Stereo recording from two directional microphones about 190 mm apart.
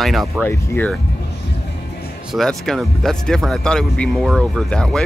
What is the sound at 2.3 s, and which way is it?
Speech, centre (ahead or behind).